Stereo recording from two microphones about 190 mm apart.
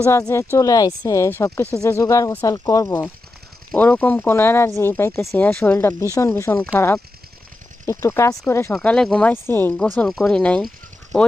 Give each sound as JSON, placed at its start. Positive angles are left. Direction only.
{"t": 0.1, "sound": "speech", "side_deg": 15}